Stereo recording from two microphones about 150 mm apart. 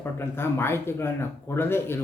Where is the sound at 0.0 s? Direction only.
15° left (ahead or behind).